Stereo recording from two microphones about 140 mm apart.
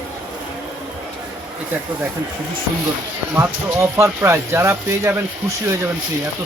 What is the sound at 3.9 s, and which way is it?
Speech, 20° right (ahead or behind).